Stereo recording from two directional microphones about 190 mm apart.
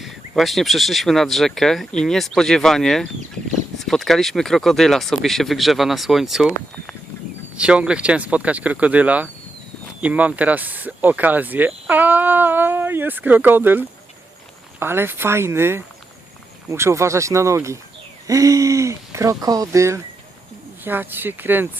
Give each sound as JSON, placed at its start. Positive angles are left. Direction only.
{"t": 0.0, "sound": "speech", "side_deg": 0}